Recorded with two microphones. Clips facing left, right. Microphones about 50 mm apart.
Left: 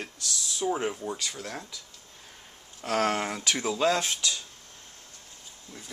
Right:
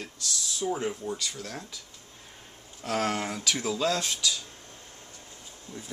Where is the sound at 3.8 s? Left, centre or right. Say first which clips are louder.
Left 2 dB; left.